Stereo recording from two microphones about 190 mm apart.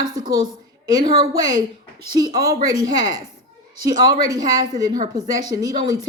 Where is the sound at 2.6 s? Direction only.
20° right (ahead or behind).